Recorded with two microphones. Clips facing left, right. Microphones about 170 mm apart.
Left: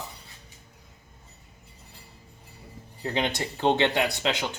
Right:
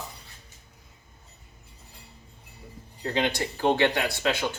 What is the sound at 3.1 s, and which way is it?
Speech, 20° left (ahead or behind).